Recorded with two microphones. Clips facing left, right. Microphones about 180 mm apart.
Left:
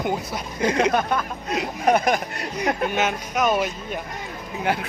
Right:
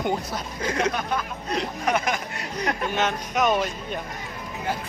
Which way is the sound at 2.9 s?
5° left (ahead or behind).